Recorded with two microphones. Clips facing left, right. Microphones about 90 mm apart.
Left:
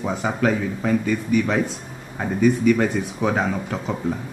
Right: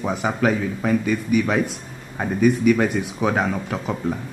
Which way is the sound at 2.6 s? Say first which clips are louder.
Even; 5° right (ahead or behind).